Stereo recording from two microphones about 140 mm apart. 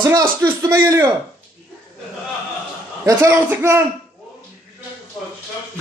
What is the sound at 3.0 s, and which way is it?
Speech, 15° right (ahead or behind).